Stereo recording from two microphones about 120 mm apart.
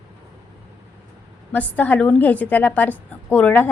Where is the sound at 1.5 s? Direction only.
15° left (ahead or behind).